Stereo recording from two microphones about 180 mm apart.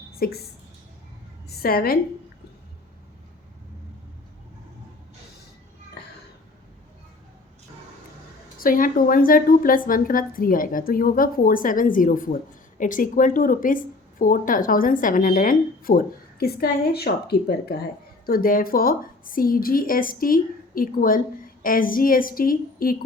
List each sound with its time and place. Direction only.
0.2 s speech: 60° left (ahead or behind)
1.5 s a woman's voice: 60° left (ahead or behind)
8.5 s a woman's voice: 50° left (ahead or behind)